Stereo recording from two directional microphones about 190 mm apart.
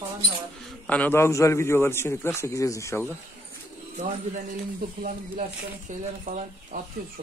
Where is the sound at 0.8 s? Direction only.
10° left (ahead or behind).